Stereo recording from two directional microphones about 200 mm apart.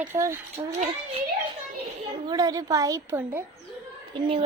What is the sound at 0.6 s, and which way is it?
Speech, 25° right (ahead or behind).